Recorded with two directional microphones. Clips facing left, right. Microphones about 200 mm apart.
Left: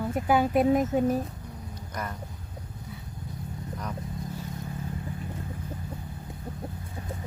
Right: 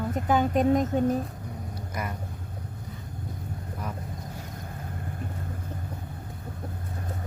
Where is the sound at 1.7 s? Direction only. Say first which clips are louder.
Right 1 dB; 10° right (ahead or behind).